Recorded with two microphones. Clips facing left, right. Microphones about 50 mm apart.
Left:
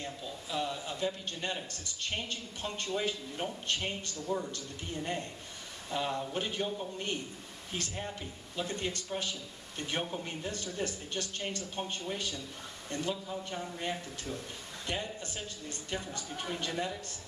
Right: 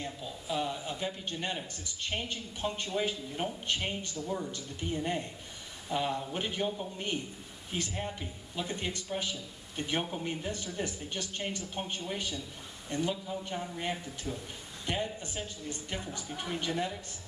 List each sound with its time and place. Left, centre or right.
0.0 s a man's voice: centre